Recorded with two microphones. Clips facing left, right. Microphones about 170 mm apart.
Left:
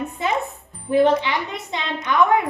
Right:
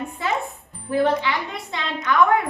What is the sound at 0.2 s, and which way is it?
Music, 20° left (ahead or behind).